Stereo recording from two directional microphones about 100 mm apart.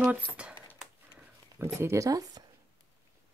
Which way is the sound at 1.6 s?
25° right (ahead or behind).